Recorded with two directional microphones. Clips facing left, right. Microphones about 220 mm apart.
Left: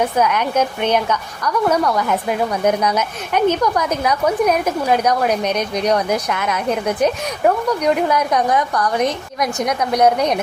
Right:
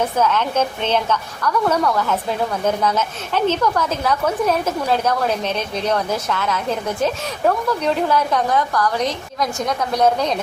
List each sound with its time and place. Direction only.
0.2 s a woman's voice: 15° left (ahead or behind)